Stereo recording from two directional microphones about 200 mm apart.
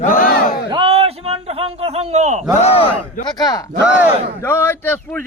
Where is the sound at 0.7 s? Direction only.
25° right (ahead or behind).